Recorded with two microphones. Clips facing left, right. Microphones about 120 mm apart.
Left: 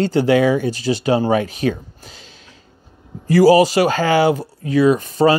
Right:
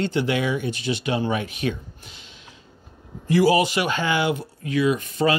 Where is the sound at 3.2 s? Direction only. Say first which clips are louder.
Left 7 dB; 40° left (ahead or behind).